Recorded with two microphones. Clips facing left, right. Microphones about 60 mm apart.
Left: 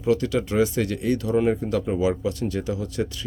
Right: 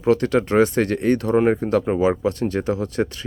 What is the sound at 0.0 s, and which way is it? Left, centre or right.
Speech, right.